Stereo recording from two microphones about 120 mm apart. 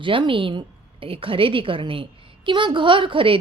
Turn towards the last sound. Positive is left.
turn(degrees=-45)  # may be behind; listen again after turning